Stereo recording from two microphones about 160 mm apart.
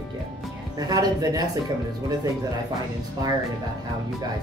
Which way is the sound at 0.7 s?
25° right (ahead or behind).